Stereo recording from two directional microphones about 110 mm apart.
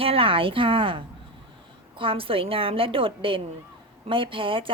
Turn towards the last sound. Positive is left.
turn(degrees=-50)  # may be behind; listen again after turning